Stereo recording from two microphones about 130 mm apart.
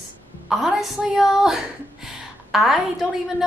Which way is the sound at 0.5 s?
Centre (ahead or behind).